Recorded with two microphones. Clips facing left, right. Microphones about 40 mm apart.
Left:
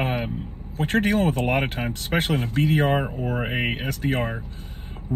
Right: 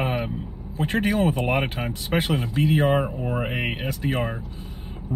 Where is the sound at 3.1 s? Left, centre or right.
Right.